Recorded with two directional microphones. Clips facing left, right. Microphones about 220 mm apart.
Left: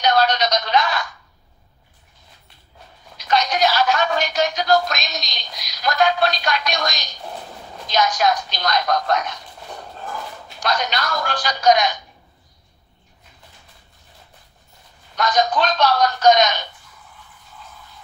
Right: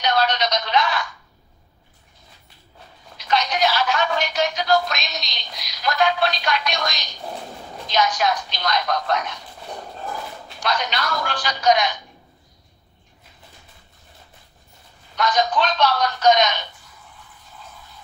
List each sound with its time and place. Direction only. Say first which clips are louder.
0.0 s speech: left 3 dB; 40° left (ahead or behind)
3.2 s speech: left 2 dB; 40° left (ahead or behind)
10.6 s speech: left 2 dB; 40° left (ahead or behind)
15.1 s speech: left 1 dB; 40° left (ahead or behind)